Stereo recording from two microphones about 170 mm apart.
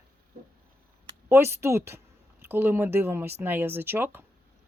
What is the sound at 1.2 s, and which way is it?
Speech, 15° right (ahead or behind).